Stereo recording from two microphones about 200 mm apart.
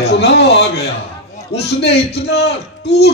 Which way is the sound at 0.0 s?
55° left (ahead or behind).